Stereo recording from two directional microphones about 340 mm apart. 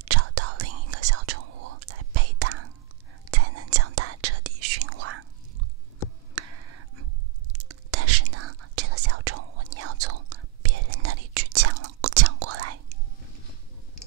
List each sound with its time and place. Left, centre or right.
0.1 s whispering: right
6.3 s a sound: right
7.5 s whispering: right